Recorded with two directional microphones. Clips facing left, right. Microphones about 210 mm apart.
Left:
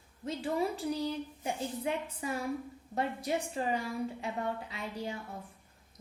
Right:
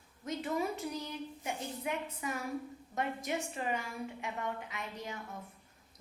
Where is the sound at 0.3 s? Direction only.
30° left (ahead or behind).